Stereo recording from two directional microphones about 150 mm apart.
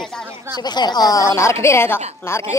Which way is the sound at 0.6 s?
30° left (ahead or behind).